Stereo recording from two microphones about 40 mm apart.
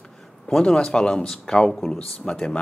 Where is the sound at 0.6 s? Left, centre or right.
Left.